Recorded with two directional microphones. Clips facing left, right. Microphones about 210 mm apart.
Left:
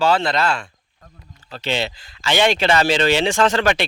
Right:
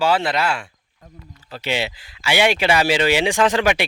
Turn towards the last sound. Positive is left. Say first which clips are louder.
# even
turn(degrees=-10)  # may be behind; listen again after turning